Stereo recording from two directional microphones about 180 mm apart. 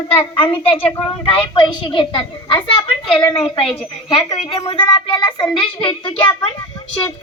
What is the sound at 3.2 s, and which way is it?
A woman's voice, 30° left (ahead or behind).